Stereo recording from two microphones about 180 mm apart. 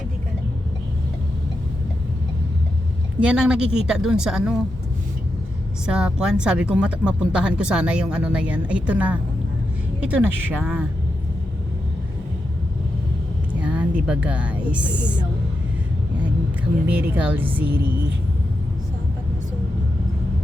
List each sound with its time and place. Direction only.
3.2 s speech: 5° right (ahead or behind)
5.8 s speech: 5° right (ahead or behind)
13.5 s speech: 10° right (ahead or behind)
16.8 s speech: 10° right (ahead or behind)